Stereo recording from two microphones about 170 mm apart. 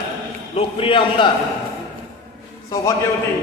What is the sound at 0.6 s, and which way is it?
Speech, 35° left (ahead or behind).